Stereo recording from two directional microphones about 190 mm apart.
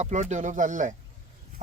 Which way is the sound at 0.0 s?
40° right (ahead or behind).